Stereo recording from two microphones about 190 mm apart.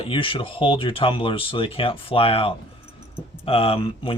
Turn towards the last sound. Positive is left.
turn(degrees=25)  # may be behind; listen again after turning